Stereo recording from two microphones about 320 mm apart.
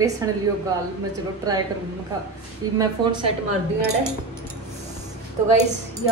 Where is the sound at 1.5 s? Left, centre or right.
Centre.